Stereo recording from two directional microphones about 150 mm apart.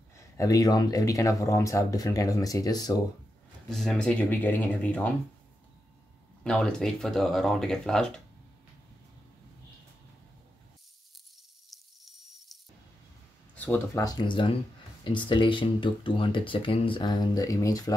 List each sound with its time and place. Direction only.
0.1 s speech: 20° left (ahead or behind)
3.7 s speech: 5° left (ahead or behind)
6.4 s speech: 5° left (ahead or behind)
13.6 s speech: 10° left (ahead or behind)
14.0 s speech: 30° left (ahead or behind)